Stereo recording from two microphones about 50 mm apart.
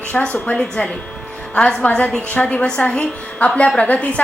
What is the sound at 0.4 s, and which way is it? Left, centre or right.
A woman's voice, left.